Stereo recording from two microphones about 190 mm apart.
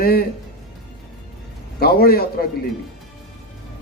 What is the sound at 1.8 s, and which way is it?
Speech, 55° left (ahead or behind).